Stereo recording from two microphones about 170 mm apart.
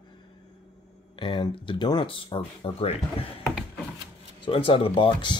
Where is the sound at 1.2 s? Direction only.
30° left (ahead or behind).